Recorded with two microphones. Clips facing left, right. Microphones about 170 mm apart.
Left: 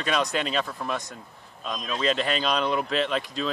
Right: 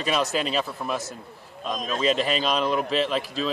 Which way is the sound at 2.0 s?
5° right (ahead or behind).